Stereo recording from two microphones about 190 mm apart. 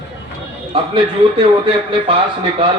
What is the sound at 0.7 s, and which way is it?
A man's voice, 30° right (ahead or behind).